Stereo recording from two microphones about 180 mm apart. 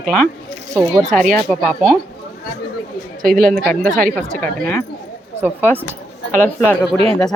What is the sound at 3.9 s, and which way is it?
Speech, 45° right (ahead or behind).